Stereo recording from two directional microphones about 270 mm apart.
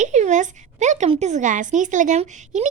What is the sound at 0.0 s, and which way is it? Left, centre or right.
A woman's voice, right.